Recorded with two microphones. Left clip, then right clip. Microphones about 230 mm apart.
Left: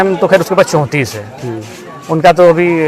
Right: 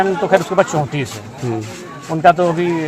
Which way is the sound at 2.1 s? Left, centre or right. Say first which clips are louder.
Left 6 dB; left.